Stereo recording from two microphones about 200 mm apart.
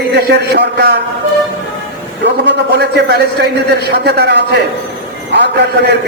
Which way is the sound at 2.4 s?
55° right (ahead or behind).